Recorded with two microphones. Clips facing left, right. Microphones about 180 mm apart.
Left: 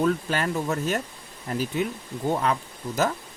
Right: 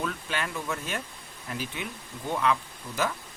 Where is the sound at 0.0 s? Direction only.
40° left (ahead or behind).